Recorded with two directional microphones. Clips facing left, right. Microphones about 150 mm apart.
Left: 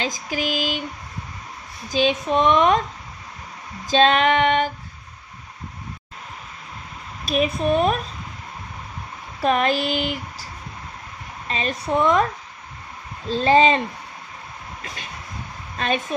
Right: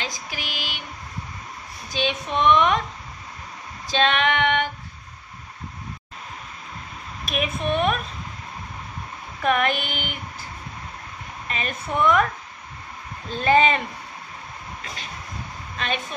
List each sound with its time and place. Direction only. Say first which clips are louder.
0.1 s speech: left 9 dB; 40° left (ahead or behind)
1.9 s speech: left 6 dB; 40° left (ahead or behind)
3.8 s speech: left 5 dB; 40° left (ahead or behind)
7.2 s speech: left 5 dB; 35° left (ahead or behind)
9.4 s speech: left 2 dB; 30° left (ahead or behind)
13.4 s speech: left 3 dB; 30° left (ahead or behind)